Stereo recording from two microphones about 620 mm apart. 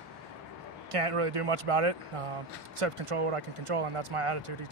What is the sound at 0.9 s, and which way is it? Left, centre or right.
Speech, right.